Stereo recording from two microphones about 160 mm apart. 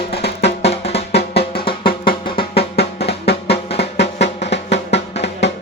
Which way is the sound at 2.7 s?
90° left.